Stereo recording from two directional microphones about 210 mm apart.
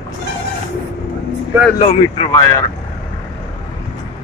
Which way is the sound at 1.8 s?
30° left (ahead or behind).